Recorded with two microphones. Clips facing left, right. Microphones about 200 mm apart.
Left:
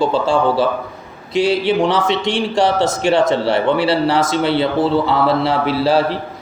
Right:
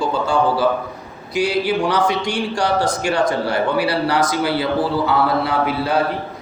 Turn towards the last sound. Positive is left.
turn(degrees=30)  # may be behind; listen again after turning